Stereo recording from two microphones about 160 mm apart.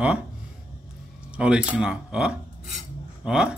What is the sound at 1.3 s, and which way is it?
Speech, 5° right (ahead or behind).